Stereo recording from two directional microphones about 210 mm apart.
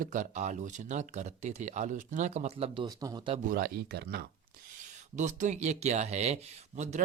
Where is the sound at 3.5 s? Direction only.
45° right (ahead or behind).